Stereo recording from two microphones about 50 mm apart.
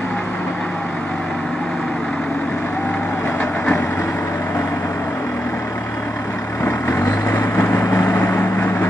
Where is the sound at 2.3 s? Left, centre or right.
Left.